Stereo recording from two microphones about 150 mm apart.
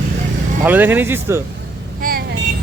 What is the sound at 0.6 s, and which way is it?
Speech, 10° right (ahead or behind).